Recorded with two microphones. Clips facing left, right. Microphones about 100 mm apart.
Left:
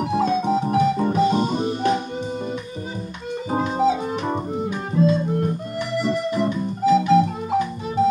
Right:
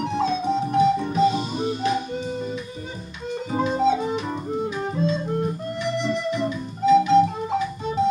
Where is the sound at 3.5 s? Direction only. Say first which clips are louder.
Left 1 dB; 45° left (ahead or behind).